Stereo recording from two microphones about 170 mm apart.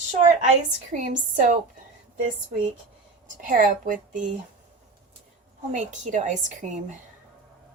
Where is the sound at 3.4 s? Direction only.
50° right (ahead or behind).